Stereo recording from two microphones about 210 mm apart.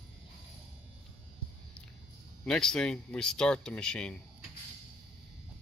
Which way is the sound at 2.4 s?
5° left (ahead or behind).